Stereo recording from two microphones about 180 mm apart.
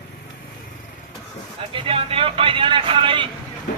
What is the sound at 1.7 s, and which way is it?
Speech, 30° right (ahead or behind).